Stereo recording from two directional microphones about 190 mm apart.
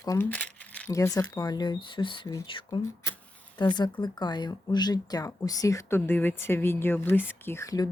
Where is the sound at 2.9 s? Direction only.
15° left (ahead or behind).